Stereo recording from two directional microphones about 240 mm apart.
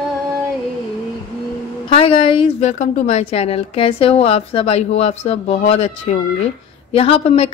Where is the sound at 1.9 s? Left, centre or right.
Left.